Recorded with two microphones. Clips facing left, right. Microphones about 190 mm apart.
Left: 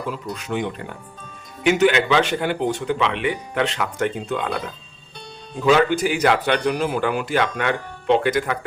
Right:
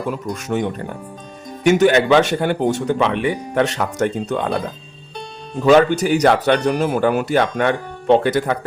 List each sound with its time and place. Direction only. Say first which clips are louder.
0.1 s speech: right 4 dB; 50° right (ahead or behind)
5.7 s speech: right 6 dB; 45° right (ahead or behind)